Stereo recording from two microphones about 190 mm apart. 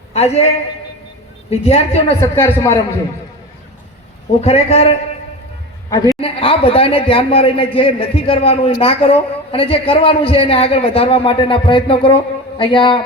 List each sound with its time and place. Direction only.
0.1 s a man's voice: 35° left (ahead or behind)
2.3 s speech: 15° left (ahead or behind)
4.4 s a man's voice: 35° left (ahead or behind)